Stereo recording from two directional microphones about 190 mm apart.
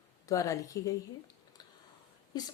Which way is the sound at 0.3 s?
15° left (ahead or behind).